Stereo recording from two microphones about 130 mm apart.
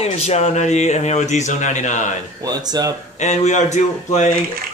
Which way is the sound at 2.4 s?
30° right (ahead or behind).